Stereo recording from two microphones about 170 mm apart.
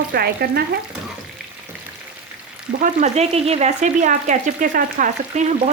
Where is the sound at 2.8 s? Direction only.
45° right (ahead or behind).